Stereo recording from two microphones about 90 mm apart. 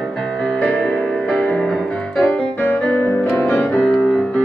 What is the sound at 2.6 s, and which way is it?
Music, 25° left (ahead or behind).